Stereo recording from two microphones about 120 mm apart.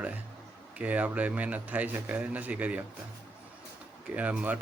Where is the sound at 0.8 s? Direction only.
10° right (ahead or behind).